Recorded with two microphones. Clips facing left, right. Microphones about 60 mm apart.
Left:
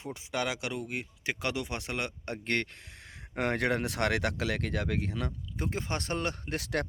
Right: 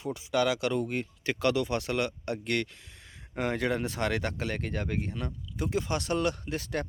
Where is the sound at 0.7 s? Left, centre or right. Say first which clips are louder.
Right 6 dB; centre; by 2.6 s left.